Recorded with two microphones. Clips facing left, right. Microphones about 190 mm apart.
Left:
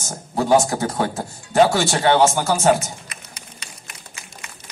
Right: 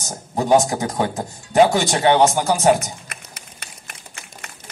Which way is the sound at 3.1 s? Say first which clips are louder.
Right 1 dB; 60° right (ahead or behind).